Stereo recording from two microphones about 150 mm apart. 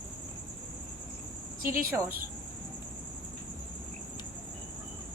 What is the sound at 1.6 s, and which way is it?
Speech, 70° right (ahead or behind).